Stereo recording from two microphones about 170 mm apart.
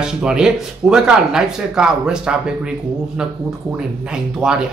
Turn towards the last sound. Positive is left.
turn(degrees=-5)  # may be behind; listen again after turning